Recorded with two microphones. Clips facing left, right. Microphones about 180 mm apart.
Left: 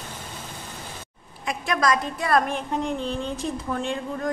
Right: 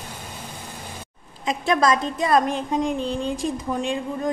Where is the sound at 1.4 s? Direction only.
25° right (ahead or behind).